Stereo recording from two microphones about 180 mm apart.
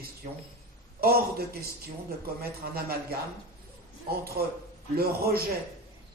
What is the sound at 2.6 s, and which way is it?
Speech, 55° right (ahead or behind).